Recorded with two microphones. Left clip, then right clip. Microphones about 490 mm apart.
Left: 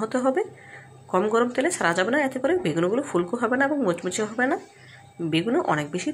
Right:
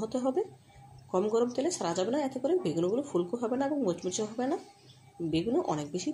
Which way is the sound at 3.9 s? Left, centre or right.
Left.